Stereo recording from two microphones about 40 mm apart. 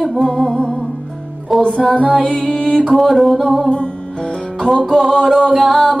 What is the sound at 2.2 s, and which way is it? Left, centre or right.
Music, left.